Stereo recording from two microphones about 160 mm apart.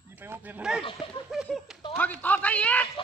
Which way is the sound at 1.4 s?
Centre (ahead or behind).